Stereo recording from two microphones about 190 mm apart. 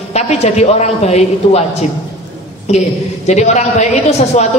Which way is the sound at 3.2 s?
35° left (ahead or behind).